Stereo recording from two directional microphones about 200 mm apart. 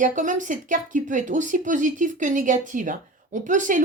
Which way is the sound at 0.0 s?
40° right (ahead or behind).